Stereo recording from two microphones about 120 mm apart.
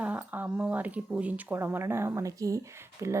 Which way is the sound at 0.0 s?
15° right (ahead or behind).